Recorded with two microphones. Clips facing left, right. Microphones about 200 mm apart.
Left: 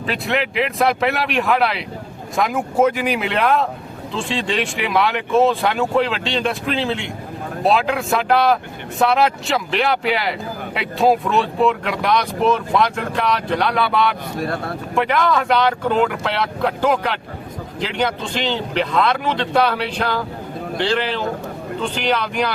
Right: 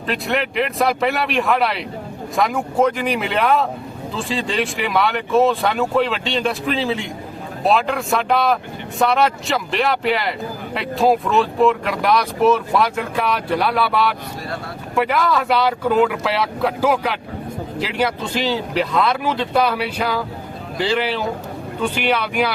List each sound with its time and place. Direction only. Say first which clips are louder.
0.1 s speech: right 1 dB; centre (ahead or behind)
14.3 s speech: left 5 dB; 55° left (ahead or behind)
14.9 s speech: even; 5° right (ahead or behind)